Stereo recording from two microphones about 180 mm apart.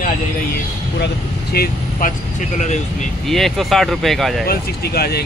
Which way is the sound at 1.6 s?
60° left (ahead or behind).